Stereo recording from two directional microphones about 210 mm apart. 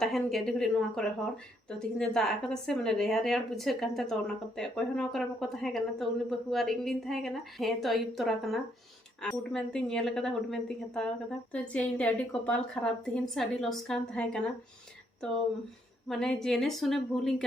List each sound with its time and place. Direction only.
0.0 s speech: centre (ahead or behind)
16.0 s speech: centre (ahead or behind)